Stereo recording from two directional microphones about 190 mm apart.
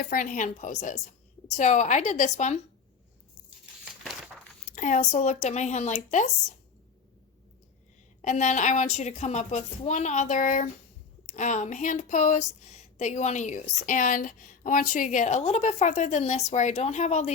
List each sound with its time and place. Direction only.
0.0 s a woman's voice: 45° left (ahead or behind)
4.0 s a sound: centre (ahead or behind)
4.7 s speech: 40° left (ahead or behind)
8.2 s speech: 40° left (ahead or behind)